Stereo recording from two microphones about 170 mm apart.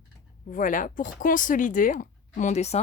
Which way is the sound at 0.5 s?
50° left (ahead or behind).